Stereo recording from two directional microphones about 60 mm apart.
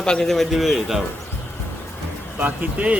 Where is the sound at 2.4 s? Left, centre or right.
Right.